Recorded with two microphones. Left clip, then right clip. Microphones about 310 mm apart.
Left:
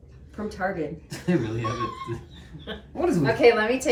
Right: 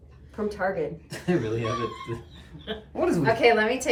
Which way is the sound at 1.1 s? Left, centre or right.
Centre.